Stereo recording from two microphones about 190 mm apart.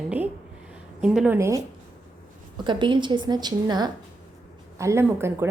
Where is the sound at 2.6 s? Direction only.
25° right (ahead or behind).